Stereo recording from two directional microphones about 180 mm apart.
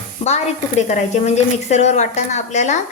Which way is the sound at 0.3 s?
40° left (ahead or behind).